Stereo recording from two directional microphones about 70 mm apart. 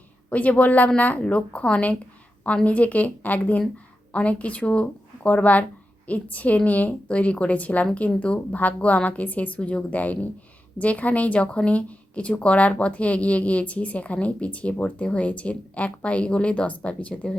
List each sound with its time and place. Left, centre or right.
0.3 s a woman's voice: left